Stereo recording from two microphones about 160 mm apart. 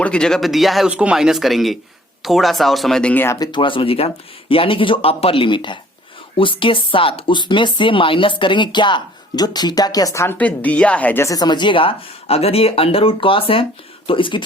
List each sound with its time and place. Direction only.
0.0 s speech: 5° left (ahead or behind)
3.3 s speech: 25° left (ahead or behind)